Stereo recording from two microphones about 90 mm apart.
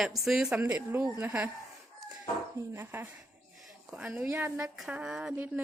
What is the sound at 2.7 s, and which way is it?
Speech, 25° right (ahead or behind).